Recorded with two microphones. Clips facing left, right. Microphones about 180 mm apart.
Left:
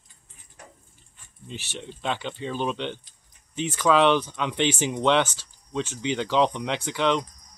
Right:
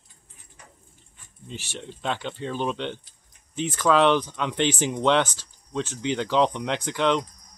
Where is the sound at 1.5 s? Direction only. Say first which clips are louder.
Even; 10° right (ahead or behind).